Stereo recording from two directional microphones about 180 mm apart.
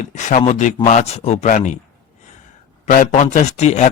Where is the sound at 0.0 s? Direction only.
45° left (ahead or behind).